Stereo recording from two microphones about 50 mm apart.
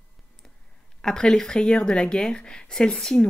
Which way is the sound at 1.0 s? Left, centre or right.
Centre.